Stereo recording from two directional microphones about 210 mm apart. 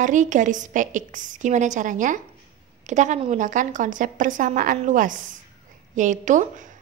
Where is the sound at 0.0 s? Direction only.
35° right (ahead or behind).